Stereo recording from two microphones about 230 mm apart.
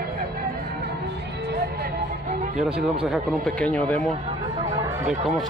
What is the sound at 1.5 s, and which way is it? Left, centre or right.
Music, right.